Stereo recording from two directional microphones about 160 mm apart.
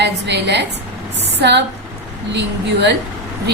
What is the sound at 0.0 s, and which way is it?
A woman's voice, 90° right.